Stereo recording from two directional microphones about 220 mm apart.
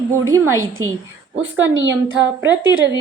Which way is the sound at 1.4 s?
60° right (ahead or behind).